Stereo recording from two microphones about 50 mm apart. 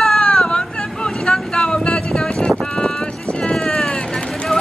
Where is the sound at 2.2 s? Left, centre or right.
Left.